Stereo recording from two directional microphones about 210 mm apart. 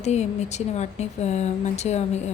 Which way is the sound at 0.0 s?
30° left (ahead or behind).